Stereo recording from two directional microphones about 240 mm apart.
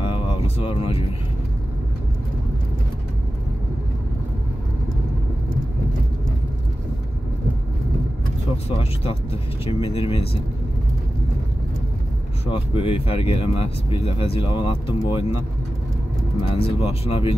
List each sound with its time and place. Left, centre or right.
0.0 s vehicle: left
8.6 s speech: left
12.4 s speech: left
16.5 s speech: left